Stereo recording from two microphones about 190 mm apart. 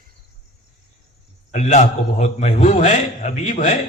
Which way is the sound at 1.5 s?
40° left (ahead or behind).